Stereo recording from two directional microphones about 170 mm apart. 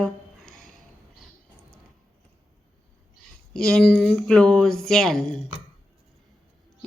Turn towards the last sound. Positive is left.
turn(degrees=0)  # may be behind; listen again after turning